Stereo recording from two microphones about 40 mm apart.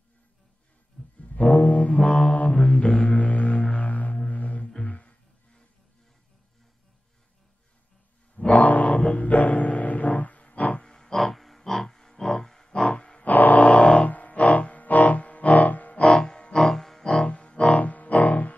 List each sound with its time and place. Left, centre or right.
1.2 s music: left
2.2 s a sound: left
3.1 s music: left
8.5 s a sound: left
9.1 s music: left; by 11.1 s centre
11.1 s a sound: centre
12.9 s grunt: left
13.2 s music: left
16.0 s music: centre
17.2 s music: left
17.7 s music: left